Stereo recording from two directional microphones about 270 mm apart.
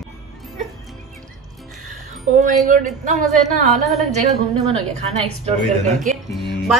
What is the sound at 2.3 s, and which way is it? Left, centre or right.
A woman's voice, right.